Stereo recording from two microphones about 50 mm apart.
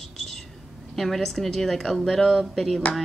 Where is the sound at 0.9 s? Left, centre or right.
Centre.